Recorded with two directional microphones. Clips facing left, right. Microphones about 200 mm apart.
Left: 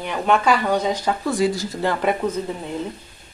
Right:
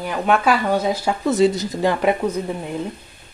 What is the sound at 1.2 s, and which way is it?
Speech, 20° right (ahead or behind).